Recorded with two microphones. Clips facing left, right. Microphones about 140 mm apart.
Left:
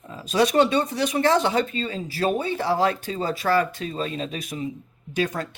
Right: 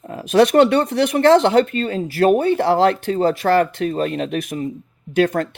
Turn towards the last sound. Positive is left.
turn(degrees=-60)  # may be behind; listen again after turning